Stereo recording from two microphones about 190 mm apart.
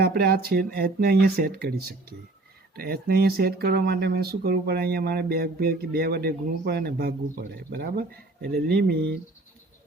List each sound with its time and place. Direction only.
0.0 s speech: 55° right (ahead or behind)